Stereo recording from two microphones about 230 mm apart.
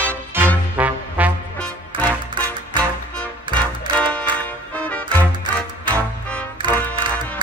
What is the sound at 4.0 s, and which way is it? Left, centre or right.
Music, centre.